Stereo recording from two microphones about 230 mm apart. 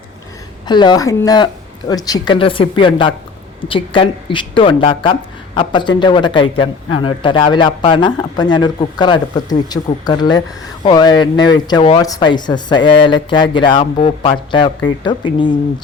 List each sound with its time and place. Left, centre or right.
0.7 s speech: centre